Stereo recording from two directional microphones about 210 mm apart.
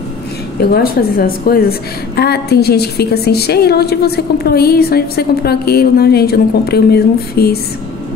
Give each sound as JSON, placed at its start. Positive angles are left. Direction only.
{"t": 0.6, "sound": "a woman's voice", "side_deg": 45}